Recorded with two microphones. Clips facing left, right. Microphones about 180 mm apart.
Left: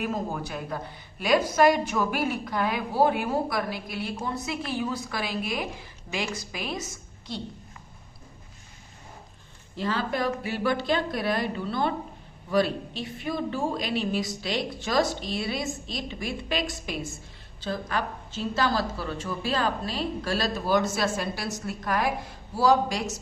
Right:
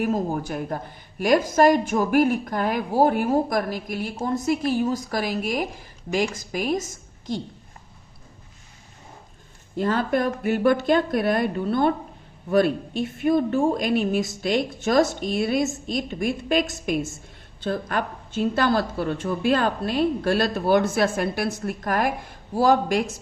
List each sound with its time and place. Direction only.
0.0 s a woman's voice: 45° right (ahead or behind)
9.7 s a woman's voice: 50° right (ahead or behind)